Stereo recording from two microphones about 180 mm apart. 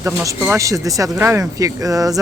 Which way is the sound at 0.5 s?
20° right (ahead or behind).